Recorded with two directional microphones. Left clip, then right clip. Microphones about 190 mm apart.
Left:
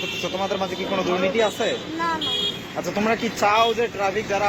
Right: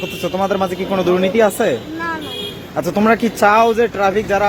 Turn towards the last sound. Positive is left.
turn(degrees=-55)  # may be behind; listen again after turning